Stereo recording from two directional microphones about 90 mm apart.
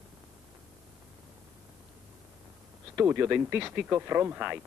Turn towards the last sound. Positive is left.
turn(degrees=-20)  # may be behind; listen again after turning